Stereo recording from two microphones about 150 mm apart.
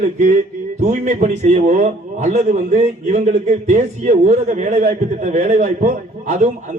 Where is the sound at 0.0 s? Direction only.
55° right (ahead or behind).